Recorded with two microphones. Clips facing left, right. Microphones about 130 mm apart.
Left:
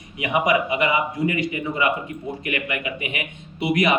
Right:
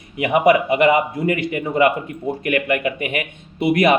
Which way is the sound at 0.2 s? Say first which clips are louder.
Right 6 dB; 55° right (ahead or behind).